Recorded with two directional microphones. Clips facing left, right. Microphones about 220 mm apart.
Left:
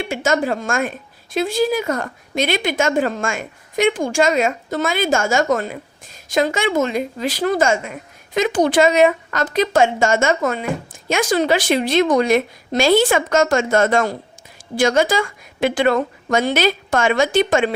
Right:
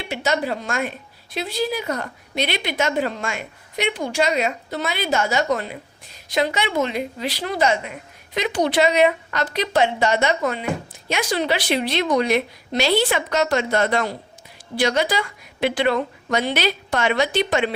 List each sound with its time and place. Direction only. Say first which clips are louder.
0.1 s speech: left 2 dB; 50° left (ahead or behind)